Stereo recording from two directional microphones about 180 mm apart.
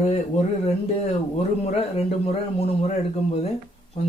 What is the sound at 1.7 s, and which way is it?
Speech, 35° left (ahead or behind).